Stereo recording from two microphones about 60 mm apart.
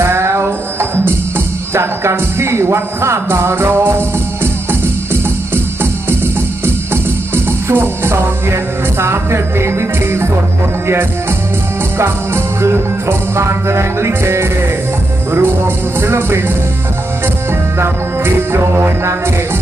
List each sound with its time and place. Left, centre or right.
0.0 s music: right
7.7 s speech: right
9.0 s music: right
11.9 s music: right
15.3 s speech: right
18.5 s music: right